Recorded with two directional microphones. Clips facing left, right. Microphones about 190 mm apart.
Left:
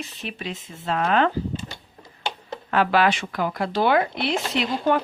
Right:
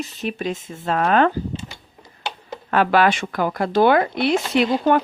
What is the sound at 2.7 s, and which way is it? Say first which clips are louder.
Speech: right 3 dB; 50° right (ahead or behind).